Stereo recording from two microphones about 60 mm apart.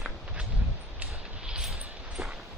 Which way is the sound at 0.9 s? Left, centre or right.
Centre.